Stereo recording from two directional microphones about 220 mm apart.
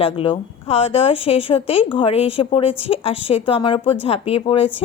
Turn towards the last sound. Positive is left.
turn(degrees=25)  # may be behind; listen again after turning